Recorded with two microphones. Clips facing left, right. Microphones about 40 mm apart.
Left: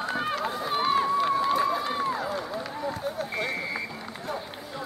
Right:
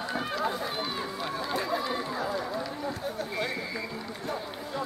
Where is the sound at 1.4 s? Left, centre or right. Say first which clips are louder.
Left 5 dB; centre.